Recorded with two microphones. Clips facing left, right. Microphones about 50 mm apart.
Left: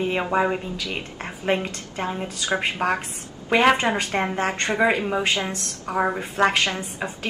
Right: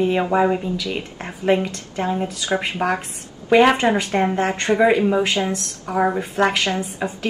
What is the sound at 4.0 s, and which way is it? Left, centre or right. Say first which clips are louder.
A woman's voice: right 4 dB; centre.